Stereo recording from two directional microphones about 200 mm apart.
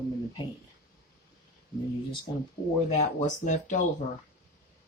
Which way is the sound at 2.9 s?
35° left (ahead or behind).